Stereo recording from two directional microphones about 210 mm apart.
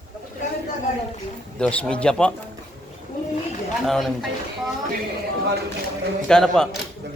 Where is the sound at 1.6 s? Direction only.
5° left (ahead or behind).